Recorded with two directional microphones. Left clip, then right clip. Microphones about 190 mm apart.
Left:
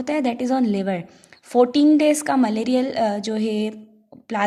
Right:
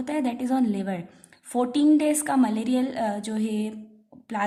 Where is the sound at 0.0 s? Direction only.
30° left (ahead or behind).